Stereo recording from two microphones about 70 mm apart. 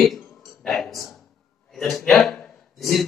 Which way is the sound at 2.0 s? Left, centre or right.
Centre.